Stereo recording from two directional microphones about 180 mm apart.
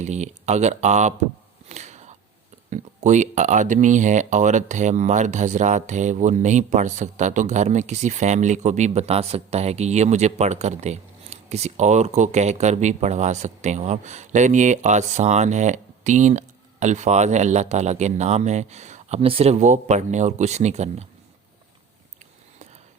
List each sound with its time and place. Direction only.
0.0 s speech: 40° right (ahead or behind)
1.7 s a sound: 40° right (ahead or behind)
2.6 s speech: 40° right (ahead or behind)